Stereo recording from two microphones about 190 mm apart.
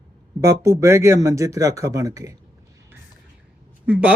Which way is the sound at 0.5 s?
15° right (ahead or behind).